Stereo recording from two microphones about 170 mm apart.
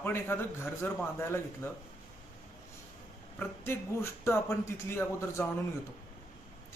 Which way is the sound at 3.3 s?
15° left (ahead or behind).